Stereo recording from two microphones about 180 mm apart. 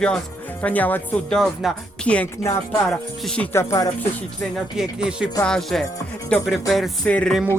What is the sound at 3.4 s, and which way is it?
Speech, 15° left (ahead or behind).